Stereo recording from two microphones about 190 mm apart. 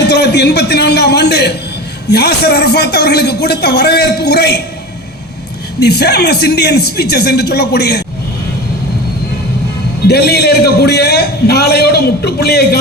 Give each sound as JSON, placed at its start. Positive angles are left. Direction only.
{"t": 0.0, "sound": "a sound", "side_deg": 60}
{"t": 2.0, "sound": "a man's voice", "side_deg": 60}
{"t": 5.8, "sound": "a man's voice", "side_deg": 60}
{"t": 10.1, "sound": "a man's voice", "side_deg": 60}